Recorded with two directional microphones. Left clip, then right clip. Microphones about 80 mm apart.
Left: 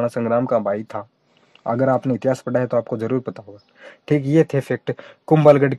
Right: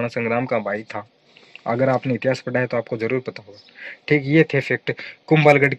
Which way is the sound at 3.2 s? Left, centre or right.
Left.